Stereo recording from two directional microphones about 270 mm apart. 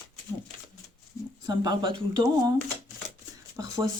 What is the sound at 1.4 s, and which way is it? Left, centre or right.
Speech, centre.